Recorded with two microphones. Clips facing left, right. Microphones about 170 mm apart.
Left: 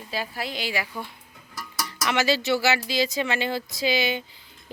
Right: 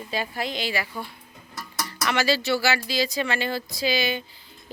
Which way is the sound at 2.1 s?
20° left (ahead or behind).